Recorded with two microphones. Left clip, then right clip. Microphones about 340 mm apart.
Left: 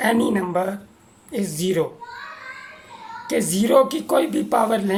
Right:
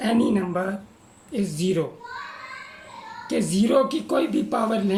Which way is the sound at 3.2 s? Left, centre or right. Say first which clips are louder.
Left 3 dB; centre.